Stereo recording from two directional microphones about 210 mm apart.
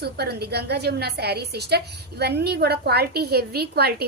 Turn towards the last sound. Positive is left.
turn(degrees=-50)  # may be behind; listen again after turning